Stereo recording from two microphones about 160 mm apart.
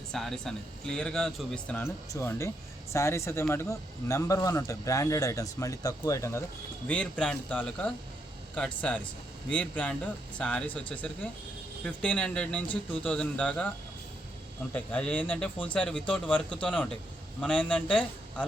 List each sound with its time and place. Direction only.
0.1 s speech: 5° left (ahead or behind); by 6.4 s 20° left (ahead or behind)
6.8 s speech: 10° left (ahead or behind)